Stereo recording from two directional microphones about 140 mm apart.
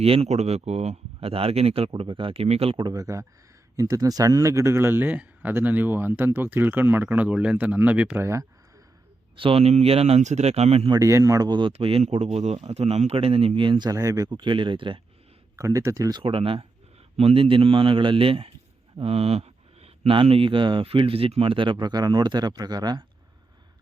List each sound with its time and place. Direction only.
0.0 s speech: 45° right (ahead or behind); by 8.4 s 20° right (ahead or behind)
9.3 s speech: 40° right (ahead or behind)
10.9 s speech: 25° right (ahead or behind)
11.7 s speech: 40° right (ahead or behind)
15.5 s speech: 25° right (ahead or behind)
16.2 s speech: 40° right (ahead or behind)